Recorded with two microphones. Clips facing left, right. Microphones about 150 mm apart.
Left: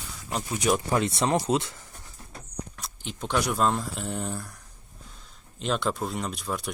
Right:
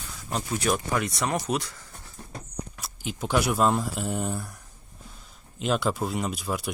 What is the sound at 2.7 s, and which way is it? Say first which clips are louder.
Speech: right 3 dB; 5° right (ahead or behind).